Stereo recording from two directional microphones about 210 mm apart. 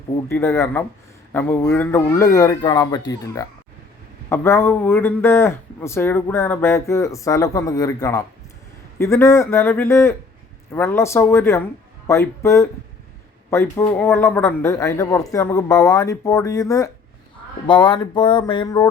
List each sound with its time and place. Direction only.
0.3 s a man's voice: 10° left (ahead or behind)